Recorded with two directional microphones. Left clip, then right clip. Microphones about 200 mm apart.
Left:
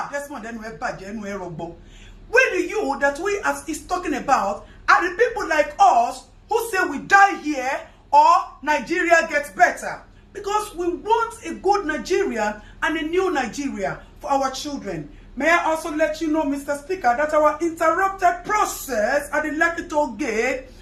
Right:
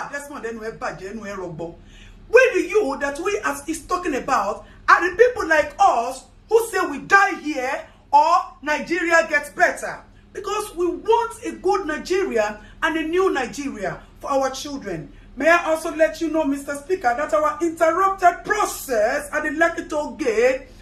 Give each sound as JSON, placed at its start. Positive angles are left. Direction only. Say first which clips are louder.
{"t": 0.1, "sound": "speech", "louder": "even", "side_deg": -15}
{"t": 2.3, "sound": "a man's voice", "louder": "right 3 dB", "side_deg": -10}
{"t": 15.4, "sound": "a man's voice", "louder": "right 1 dB", "side_deg": -15}